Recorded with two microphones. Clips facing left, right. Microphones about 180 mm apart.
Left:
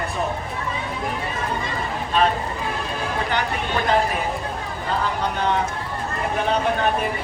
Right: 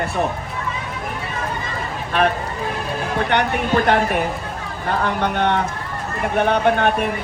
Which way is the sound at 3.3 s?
65° right (ahead or behind).